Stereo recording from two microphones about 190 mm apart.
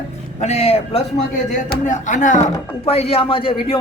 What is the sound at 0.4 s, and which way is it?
Speech, 35° left (ahead or behind).